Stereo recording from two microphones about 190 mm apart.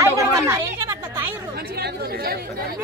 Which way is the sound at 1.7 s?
55° right (ahead or behind).